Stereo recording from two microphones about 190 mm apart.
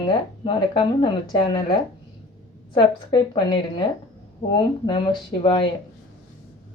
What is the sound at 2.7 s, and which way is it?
A woman's voice, 25° left (ahead or behind).